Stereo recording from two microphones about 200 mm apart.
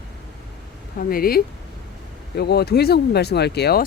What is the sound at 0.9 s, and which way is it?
Speech, 45° left (ahead or behind).